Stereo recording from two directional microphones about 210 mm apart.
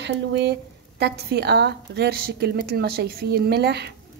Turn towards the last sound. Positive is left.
turn(degrees=-50)  # may be behind; listen again after turning